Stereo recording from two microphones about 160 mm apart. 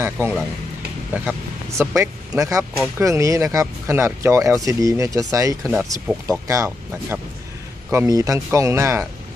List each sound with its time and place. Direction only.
0.0 s speech: 15° right (ahead or behind)